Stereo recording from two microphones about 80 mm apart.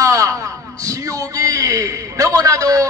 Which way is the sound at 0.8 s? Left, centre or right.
Right.